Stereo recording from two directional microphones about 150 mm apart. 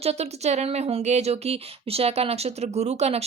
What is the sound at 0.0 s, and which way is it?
Speech, 45° right (ahead or behind).